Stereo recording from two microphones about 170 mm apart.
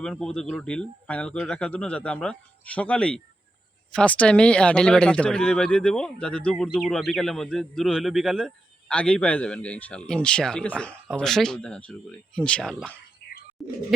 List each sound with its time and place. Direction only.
0.0 s a man's voice: 5° left (ahead or behind)
13.2 s bird: 65° left (ahead or behind)
13.6 s a man's voice: centre (ahead or behind)